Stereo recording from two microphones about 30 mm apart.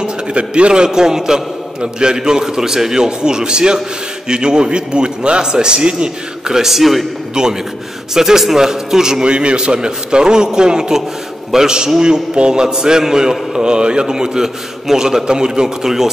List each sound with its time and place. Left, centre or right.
0.0 s a sound: right
0.8 s a man's voice: right
6.5 s a man's voice: centre
7.4 s a man's voice: right
8.1 s a man's voice: centre
9.2 s a man's voice: right
15.8 s a man's voice: centre